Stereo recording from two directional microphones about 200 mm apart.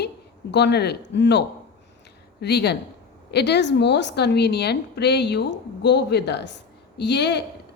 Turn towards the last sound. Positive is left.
turn(degrees=60)  # may be behind; listen again after turning